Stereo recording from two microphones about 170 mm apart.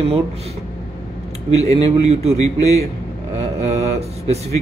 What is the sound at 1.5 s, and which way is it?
A man's voice, 40° right (ahead or behind).